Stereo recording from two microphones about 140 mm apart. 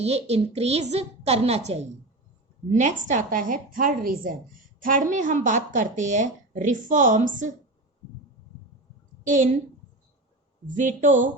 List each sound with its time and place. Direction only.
0.0 s a woman's voice: 50° right (ahead or behind); by 7.5 s 65° right (ahead or behind)
9.2 s a woman's voice: 65° right (ahead or behind)
10.8 s a woman's voice: 65° right (ahead or behind)